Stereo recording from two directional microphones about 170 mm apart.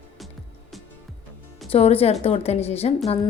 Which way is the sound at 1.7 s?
35° left (ahead or behind).